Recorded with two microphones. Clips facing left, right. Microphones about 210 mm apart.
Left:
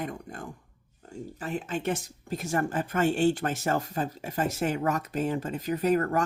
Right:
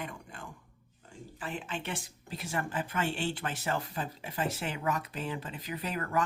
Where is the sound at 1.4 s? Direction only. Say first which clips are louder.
Left 6 dB; 40° left (ahead or behind).